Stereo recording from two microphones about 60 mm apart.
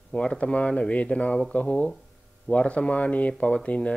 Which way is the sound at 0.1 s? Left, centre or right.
Centre.